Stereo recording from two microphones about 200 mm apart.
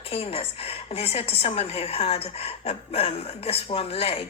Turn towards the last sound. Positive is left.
turn(degrees=30)  # may be behind; listen again after turning